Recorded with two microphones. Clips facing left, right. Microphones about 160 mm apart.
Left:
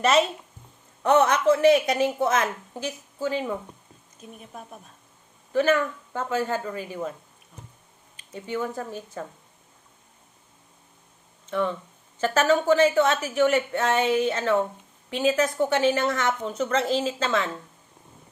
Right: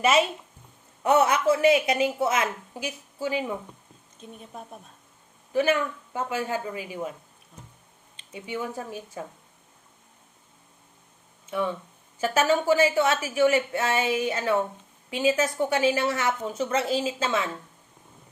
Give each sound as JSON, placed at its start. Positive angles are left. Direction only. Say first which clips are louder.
{"t": 0.0, "sound": "a woman's voice", "louder": "left 1 dB", "side_deg": -5}
{"t": 4.2, "sound": "speech", "louder": "even", "side_deg": -25}
{"t": 5.5, "sound": "a woman's voice", "louder": "left 2 dB", "side_deg": -10}
{"t": 8.3, "sound": "a woman's voice", "louder": "left 3 dB", "side_deg": -10}
{"t": 12.2, "sound": "a woman's voice", "louder": "left 1 dB", "side_deg": -10}